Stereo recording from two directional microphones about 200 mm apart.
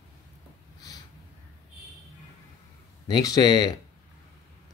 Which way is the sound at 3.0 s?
20° left (ahead or behind).